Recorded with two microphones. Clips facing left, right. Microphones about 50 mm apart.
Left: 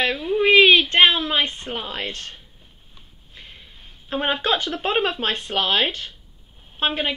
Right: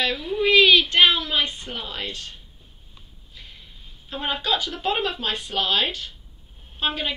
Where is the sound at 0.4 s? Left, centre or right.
Left.